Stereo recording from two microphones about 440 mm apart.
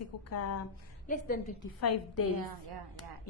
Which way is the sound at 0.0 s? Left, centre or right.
Left.